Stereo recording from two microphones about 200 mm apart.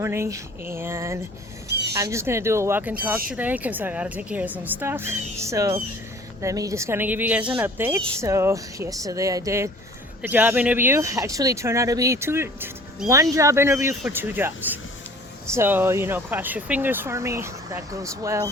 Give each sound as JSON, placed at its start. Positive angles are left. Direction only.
{"t": 0.0, "sound": "speech", "side_deg": -15}